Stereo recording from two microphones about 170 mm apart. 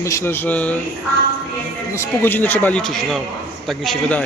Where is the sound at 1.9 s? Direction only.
15° left (ahead or behind).